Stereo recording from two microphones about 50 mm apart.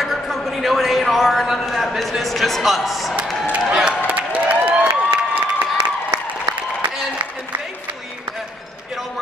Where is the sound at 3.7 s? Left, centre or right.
Centre.